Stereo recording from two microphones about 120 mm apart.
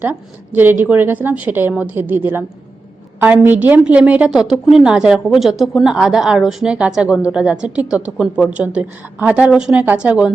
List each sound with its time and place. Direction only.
0.0 s a woman's voice: 15° right (ahead or behind)
3.4 s a woman's voice: 15° right (ahead or behind)